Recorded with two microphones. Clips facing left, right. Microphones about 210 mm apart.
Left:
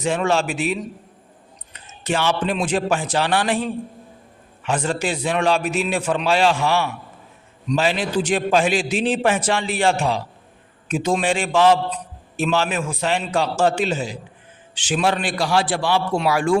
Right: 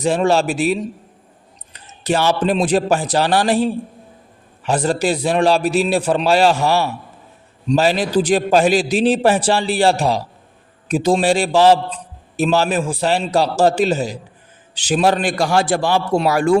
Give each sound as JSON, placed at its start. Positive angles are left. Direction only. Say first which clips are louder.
{"t": 0.0, "sound": "a man's voice", "louder": "right 4 dB", "side_deg": -35}